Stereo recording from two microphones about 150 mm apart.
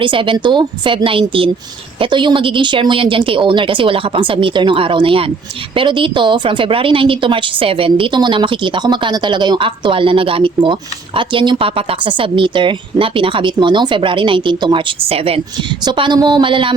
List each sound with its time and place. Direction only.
0.0 s a woman's voice: 35° right (ahead or behind)